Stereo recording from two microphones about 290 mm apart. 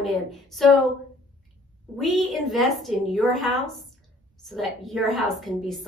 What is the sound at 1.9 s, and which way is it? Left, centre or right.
A woman's voice, centre.